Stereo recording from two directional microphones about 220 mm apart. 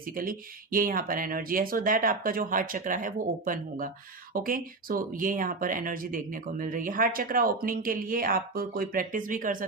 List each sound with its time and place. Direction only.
0.0 s speech: 40° right (ahead or behind)